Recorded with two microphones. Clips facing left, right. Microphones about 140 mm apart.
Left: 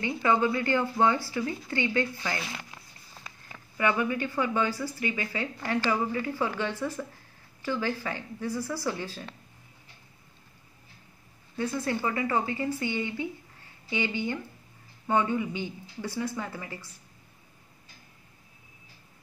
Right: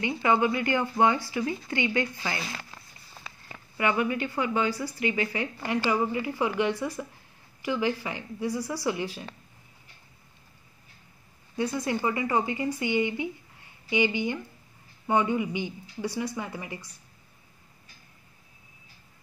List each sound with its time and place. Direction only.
0.0 s speech: 20° right (ahead or behind)
11.5 s speech: 15° right (ahead or behind)